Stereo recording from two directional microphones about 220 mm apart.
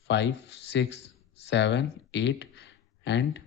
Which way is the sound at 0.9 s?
30° left (ahead or behind).